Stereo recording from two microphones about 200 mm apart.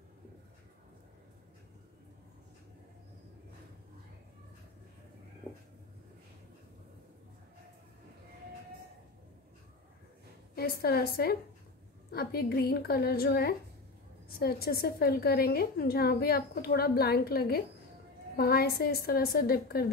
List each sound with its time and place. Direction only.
10.5 s a woman's voice: 50° left (ahead or behind)